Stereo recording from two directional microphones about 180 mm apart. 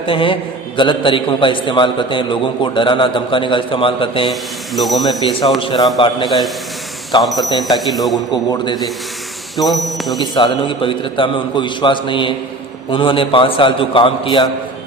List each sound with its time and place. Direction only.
0.0 s a man's voice: 30° left (ahead or behind)
4.3 s a man's voice: centre (ahead or behind)
5.5 s a man's voice: 25° left (ahead or behind)
7.2 s a man's voice: centre (ahead or behind)
8.3 s a man's voice: 20° left (ahead or behind)
9.6 s a man's voice: centre (ahead or behind)
10.2 s a man's voice: 25° left (ahead or behind)